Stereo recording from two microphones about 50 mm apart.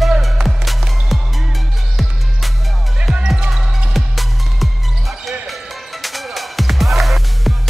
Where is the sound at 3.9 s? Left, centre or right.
Centre.